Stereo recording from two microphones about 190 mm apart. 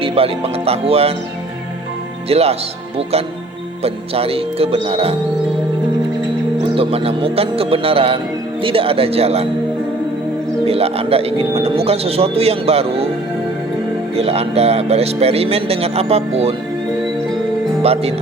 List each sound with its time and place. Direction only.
0.0 s speech: 30° right (ahead or behind)
2.3 s speech: 30° right (ahead or behind)
3.8 s speech: 30° right (ahead or behind)
6.7 s speech: 30° right (ahead or behind)
10.7 s speech: 30° right (ahead or behind)
14.2 s speech: 35° right (ahead or behind)
17.8 s speech: 30° right (ahead or behind)